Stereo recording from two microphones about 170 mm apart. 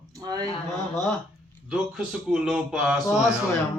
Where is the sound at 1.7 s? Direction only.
5° right (ahead or behind).